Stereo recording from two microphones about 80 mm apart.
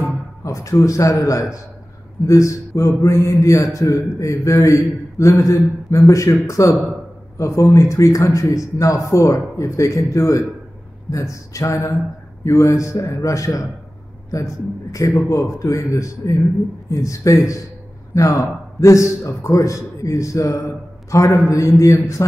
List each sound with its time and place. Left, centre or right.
0.4 s a man's voice: left